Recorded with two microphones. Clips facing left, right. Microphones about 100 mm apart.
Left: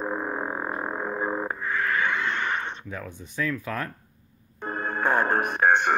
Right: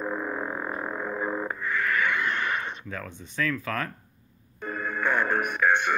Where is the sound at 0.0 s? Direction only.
20° left (ahead or behind).